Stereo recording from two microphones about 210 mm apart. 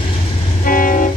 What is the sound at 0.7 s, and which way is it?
Vehicle, 40° left (ahead or behind).